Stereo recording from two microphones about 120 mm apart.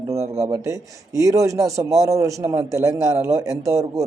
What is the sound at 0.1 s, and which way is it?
Speech, 25° right (ahead or behind).